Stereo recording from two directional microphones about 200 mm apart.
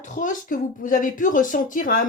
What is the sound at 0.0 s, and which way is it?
A woman's voice, 40° left (ahead or behind).